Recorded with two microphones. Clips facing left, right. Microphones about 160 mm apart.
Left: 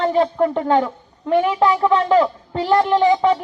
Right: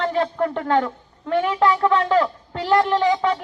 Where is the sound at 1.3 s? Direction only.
15° left (ahead or behind).